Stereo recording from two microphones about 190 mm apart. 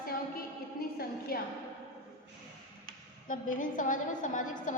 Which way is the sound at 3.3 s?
45° left (ahead or behind).